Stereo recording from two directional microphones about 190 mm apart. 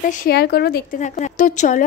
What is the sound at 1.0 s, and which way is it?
Speech, 40° left (ahead or behind).